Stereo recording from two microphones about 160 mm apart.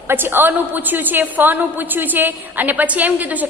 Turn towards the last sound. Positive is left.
turn(degrees=-10)  # may be behind; listen again after turning